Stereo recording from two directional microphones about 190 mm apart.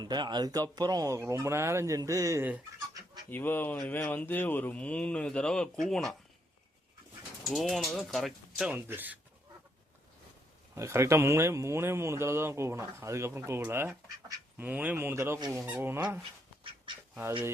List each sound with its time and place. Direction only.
0.0 s speech: 20° right (ahead or behind)
3.2 s speech: 10° left (ahead or behind)
7.5 s speech: centre (ahead or behind)
10.8 s speech: 15° right (ahead or behind)